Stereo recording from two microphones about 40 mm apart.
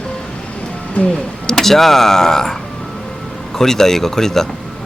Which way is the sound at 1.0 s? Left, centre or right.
Left.